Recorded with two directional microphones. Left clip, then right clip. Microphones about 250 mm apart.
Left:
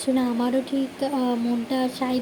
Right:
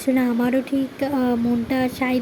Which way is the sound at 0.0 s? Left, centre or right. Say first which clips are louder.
Right 3 dB; right.